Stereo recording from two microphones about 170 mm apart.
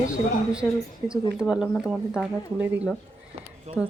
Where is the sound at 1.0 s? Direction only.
10° right (ahead or behind).